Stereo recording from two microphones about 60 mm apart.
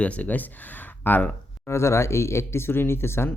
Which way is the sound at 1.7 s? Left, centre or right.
Left.